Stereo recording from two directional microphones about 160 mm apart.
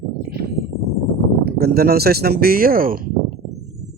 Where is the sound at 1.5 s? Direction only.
75° right (ahead or behind).